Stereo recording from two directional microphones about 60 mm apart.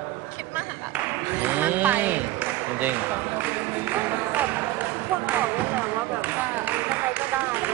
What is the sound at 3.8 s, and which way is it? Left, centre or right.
Music, right.